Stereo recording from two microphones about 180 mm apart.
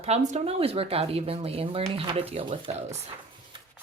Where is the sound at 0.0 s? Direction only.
40° right (ahead or behind).